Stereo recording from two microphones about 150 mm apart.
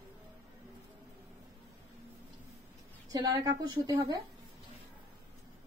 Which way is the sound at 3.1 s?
25° right (ahead or behind).